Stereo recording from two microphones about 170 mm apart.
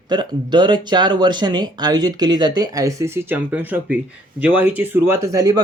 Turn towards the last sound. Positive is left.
turn(degrees=-20)  # may be behind; listen again after turning